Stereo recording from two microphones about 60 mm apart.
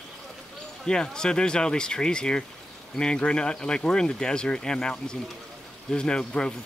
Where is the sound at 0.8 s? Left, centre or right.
Centre.